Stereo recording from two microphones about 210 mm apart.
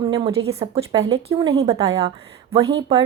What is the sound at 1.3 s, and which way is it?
Speech, 20° right (ahead or behind).